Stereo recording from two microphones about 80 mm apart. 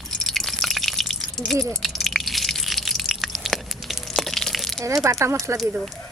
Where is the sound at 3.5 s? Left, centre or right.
Centre.